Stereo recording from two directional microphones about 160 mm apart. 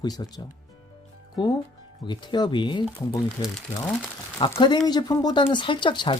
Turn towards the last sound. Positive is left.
turn(degrees=30)  # may be behind; listen again after turning